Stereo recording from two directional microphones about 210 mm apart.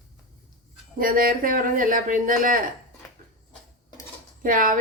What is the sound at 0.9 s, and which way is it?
Speech, 45° right (ahead or behind).